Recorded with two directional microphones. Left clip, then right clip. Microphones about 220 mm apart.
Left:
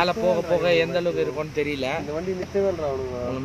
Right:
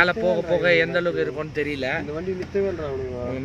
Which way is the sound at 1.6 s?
Centre (ahead or behind).